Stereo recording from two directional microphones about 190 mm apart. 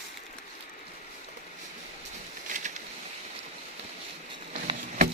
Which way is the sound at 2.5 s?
45° right (ahead or behind).